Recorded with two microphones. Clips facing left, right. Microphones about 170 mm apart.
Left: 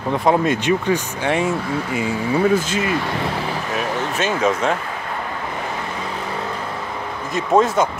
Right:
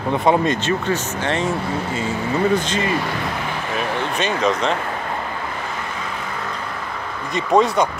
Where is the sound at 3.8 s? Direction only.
5° left (ahead or behind).